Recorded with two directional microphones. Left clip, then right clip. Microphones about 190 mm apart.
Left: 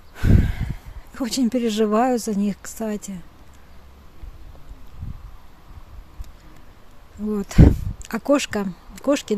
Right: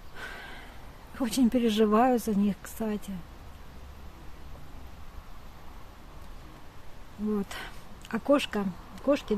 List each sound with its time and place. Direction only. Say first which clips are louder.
0.1 s a sound: left 14 dB; 35° left (ahead or behind)
1.1 s speech: left 4 dB; 30° left (ahead or behind)
7.3 s speech: left 15 dB; 35° left (ahead or behind)